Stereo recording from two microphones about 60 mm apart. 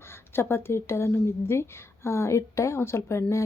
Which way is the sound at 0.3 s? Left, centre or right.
Left.